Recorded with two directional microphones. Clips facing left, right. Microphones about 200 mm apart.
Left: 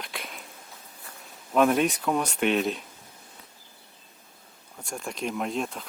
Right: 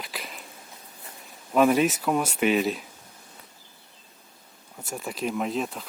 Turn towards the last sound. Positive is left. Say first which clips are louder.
# right 2 dB
turn(degrees=0)  # may be behind; listen again after turning